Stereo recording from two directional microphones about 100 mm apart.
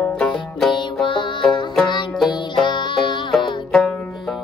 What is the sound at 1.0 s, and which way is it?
Music, 55° left (ahead or behind).